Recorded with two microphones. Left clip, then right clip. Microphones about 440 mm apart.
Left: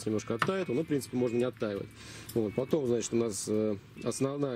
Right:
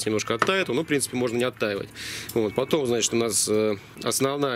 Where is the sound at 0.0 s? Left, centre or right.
Centre.